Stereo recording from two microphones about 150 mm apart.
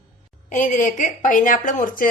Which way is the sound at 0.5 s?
60° left (ahead or behind).